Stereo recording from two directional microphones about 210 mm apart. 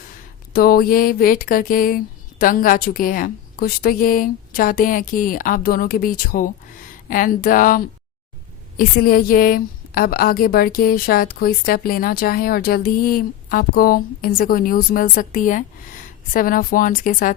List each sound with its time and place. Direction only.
0.5 s a woman's voice: 45° left (ahead or behind)